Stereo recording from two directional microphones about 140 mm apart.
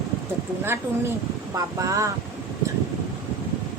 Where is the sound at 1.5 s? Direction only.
25° right (ahead or behind).